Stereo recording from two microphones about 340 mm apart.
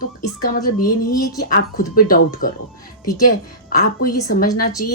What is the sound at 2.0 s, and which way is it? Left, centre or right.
Speech, left.